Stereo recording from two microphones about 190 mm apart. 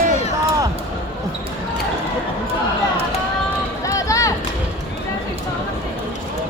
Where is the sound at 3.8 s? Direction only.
15° left (ahead or behind).